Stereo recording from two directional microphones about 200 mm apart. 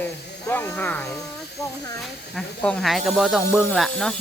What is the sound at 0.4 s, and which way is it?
Speech, 5° left (ahead or behind).